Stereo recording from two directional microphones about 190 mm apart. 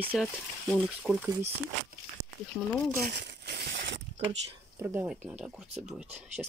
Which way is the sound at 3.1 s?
55° right (ahead or behind).